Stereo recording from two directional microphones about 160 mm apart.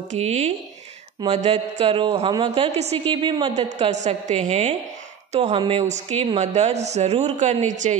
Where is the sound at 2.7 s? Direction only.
45° right (ahead or behind).